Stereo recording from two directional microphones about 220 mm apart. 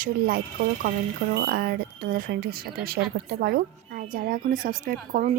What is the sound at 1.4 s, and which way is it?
A woman's voice, 45° right (ahead or behind).